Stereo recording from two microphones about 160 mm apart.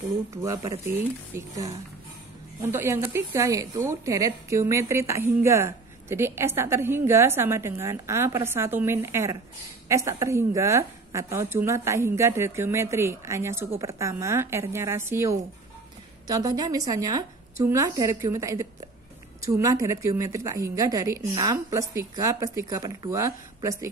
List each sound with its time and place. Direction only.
0.3 s a woman's voice: 20° right (ahead or behind)